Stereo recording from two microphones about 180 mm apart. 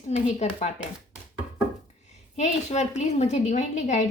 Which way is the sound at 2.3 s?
40° left (ahead or behind).